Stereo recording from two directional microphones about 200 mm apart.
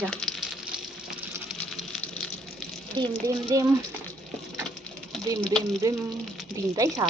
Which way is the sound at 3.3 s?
15° right (ahead or behind).